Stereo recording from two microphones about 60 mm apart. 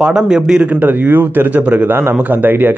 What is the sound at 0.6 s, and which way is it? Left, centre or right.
A man's voice, right.